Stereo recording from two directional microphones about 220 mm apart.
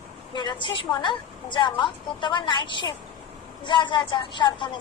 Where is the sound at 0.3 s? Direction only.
20° left (ahead or behind).